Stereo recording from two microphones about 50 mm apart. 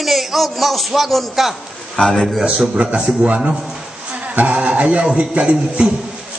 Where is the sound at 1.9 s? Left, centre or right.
Centre.